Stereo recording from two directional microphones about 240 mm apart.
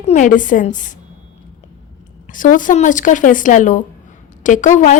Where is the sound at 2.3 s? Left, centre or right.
Left.